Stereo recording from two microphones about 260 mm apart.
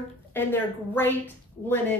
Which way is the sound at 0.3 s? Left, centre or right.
Centre.